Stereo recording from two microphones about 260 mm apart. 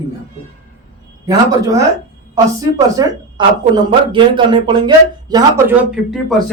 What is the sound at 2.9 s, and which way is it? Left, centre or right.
Speech, centre.